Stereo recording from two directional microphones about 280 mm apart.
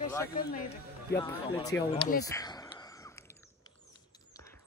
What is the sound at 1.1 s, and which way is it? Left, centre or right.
Speech, centre.